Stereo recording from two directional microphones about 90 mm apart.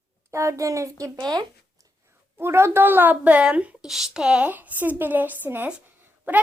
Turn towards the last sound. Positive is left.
turn(degrees=-20)  # may be behind; listen again after turning